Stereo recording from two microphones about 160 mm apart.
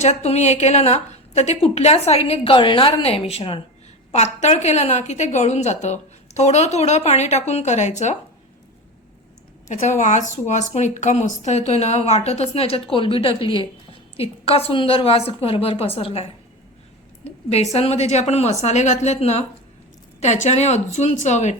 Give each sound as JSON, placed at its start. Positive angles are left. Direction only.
{"t": 0.0, "sound": "a woman's voice", "side_deg": 45}
{"t": 9.6, "sound": "a woman's voice", "side_deg": 50}
{"t": 17.2, "sound": "a woman's voice", "side_deg": 40}